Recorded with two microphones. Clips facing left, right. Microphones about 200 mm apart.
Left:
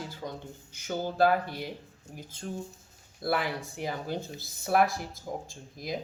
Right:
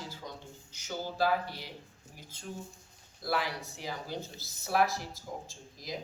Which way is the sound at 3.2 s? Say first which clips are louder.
Left 4 dB; 55° left (ahead or behind).